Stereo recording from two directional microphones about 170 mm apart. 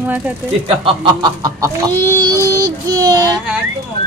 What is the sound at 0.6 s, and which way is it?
Speech, 30° right (ahead or behind).